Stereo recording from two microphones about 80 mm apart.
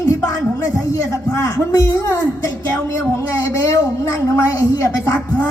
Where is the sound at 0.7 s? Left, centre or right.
Left.